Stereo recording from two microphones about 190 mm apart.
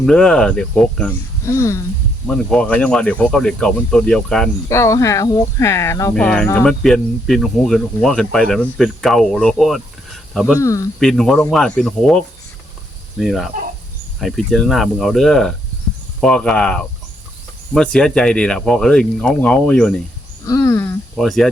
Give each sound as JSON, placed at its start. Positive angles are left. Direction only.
{"t": 0.0, "sound": "speech", "side_deg": 5}
{"t": 1.5, "sound": "speech", "side_deg": 15}
{"t": 2.2, "sound": "speech", "side_deg": 5}
{"t": 4.7, "sound": "speech", "side_deg": 15}
{"t": 10.6, "sound": "speech", "side_deg": 15}
{"t": 11.0, "sound": "speech", "side_deg": 0}
{"t": 20.4, "sound": "speech", "side_deg": 15}
{"t": 21.2, "sound": "speech", "side_deg": 0}